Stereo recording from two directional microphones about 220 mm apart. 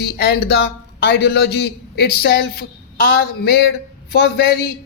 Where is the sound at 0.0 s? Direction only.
45° left (ahead or behind).